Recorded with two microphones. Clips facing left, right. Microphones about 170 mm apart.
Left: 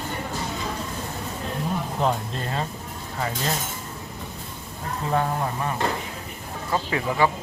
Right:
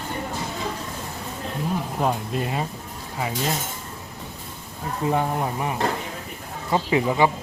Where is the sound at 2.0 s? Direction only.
10° right (ahead or behind).